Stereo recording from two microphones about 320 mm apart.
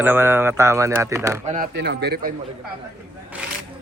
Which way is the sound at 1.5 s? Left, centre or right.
Right.